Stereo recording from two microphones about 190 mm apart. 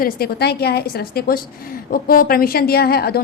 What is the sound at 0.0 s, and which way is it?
A woman's voice, 55° left (ahead or behind).